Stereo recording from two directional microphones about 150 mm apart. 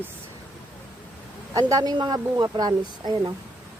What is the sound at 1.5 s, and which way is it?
Speech, 25° right (ahead or behind).